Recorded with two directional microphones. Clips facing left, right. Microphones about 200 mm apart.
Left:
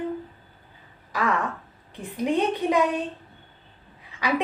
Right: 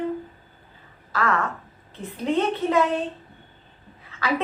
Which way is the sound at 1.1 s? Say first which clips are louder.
Right 1 dB; 15° left (ahead or behind).